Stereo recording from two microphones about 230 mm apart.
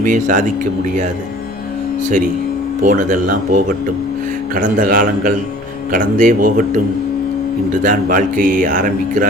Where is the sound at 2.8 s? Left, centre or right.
Right.